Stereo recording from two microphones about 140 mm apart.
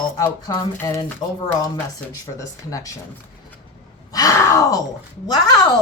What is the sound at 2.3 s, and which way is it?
Speech, 25° left (ahead or behind).